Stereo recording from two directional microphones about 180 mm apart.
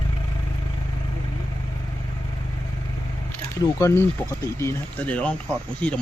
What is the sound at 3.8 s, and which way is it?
Speech, 15° left (ahead or behind).